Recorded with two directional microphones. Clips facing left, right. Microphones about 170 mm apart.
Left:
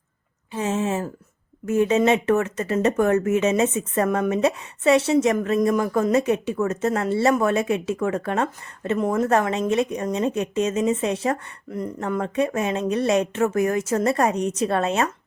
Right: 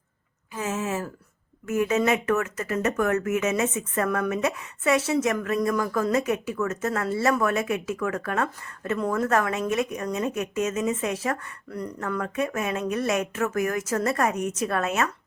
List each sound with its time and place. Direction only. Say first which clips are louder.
0.5 s speech: left 5 dB; 30° left (ahead or behind)